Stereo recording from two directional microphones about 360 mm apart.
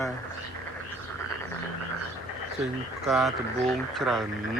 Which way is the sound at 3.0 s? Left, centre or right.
Centre.